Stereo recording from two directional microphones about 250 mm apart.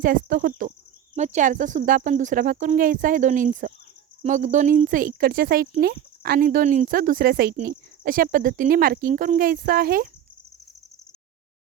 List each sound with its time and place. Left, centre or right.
0.0 s speech: right